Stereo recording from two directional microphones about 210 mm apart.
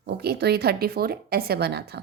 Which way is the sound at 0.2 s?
50° right (ahead or behind).